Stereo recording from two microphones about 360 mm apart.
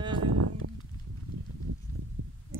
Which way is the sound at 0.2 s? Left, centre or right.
Right.